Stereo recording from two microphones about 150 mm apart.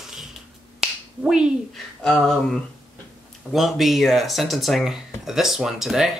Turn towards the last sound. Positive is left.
turn(degrees=0)  # may be behind; listen again after turning